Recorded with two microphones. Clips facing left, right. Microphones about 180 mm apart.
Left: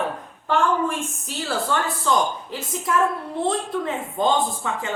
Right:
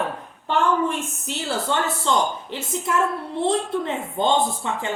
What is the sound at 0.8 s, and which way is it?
A woman's voice, 20° right (ahead or behind).